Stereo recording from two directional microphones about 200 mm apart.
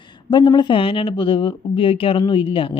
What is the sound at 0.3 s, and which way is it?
Speech, 25° left (ahead or behind).